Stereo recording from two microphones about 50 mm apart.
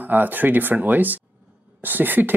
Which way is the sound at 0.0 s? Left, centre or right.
Right.